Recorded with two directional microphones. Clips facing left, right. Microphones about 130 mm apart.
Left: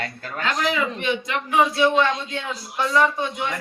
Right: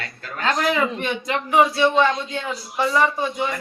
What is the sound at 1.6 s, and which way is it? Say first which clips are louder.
Speech: right 1 dB; centre (ahead or behind).